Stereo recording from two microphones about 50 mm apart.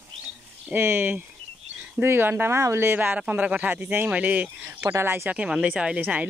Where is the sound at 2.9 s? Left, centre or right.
Right.